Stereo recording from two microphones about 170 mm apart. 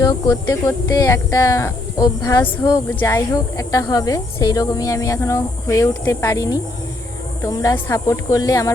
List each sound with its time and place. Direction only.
0.0 s speech: 20° left (ahead or behind)